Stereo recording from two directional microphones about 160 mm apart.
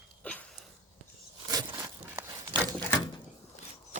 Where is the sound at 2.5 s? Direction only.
10° left (ahead or behind).